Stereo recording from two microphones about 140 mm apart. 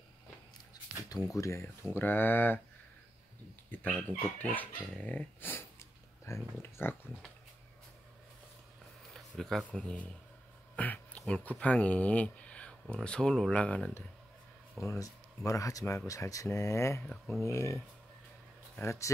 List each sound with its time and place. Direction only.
1.3 s speech: 20° left (ahead or behind)
3.7 s speech: 10° left (ahead or behind)
9.1 s a sound: centre (ahead or behind)
9.8 s speech: 5° left (ahead or behind)
14.8 s speech: 20° left (ahead or behind)
17.0 s speech: 5° left (ahead or behind)
17.5 s speech: 20° left (ahead or behind)
18.8 s speech: 20° left (ahead or behind)